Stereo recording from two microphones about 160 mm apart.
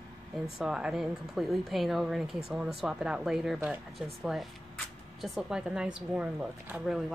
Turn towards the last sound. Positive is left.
turn(degrees=-5)  # may be behind; listen again after turning